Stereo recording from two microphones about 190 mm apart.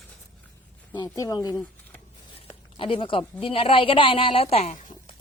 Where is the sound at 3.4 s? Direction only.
30° left (ahead or behind).